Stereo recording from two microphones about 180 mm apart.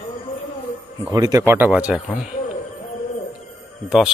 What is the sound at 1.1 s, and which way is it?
Speech, 20° right (ahead or behind).